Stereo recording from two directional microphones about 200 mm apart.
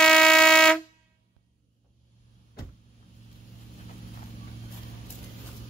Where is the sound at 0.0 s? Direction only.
5° left (ahead or behind).